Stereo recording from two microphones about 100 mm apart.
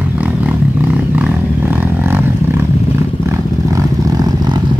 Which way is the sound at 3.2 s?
35° right (ahead or behind).